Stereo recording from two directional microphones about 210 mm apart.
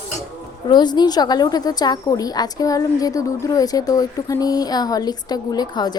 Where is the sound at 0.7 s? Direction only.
20° left (ahead or behind).